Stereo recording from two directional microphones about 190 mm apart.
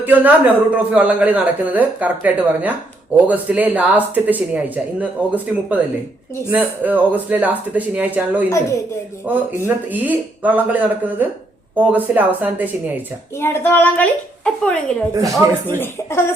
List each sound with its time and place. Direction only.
0.0 s speech: 10° right (ahead or behind)
8.4 s a woman's voice: 15° left (ahead or behind)
9.3 s speech: 10° right (ahead or behind)
13.4 s a woman's voice: 10° left (ahead or behind)
15.1 s speech: 20° right (ahead or behind)
15.6 s a woman's voice: 10° left (ahead or behind)